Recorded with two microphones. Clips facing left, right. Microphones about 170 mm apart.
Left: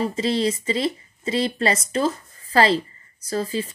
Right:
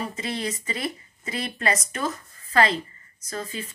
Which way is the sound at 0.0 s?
30° left (ahead or behind).